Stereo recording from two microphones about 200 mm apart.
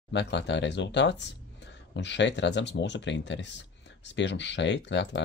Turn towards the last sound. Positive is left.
turn(degrees=60)  # may be behind; listen again after turning